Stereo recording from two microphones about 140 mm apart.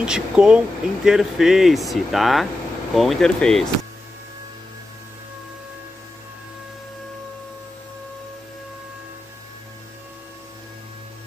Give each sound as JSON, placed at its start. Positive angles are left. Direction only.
{"t": 0.0, "sound": "speech", "side_deg": -5}